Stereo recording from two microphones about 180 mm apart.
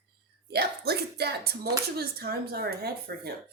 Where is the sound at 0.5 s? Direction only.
65° right (ahead or behind).